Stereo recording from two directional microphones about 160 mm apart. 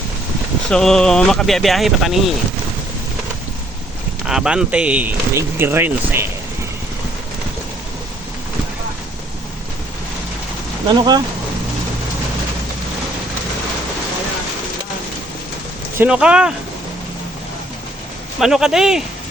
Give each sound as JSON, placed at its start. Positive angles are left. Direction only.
{"t": 0.7, "sound": "speech", "side_deg": 5}
{"t": 4.3, "sound": "speech", "side_deg": -5}
{"t": 10.8, "sound": "speech", "side_deg": -25}
{"t": 16.0, "sound": "speech", "side_deg": -5}
{"t": 18.3, "sound": "speech", "side_deg": -5}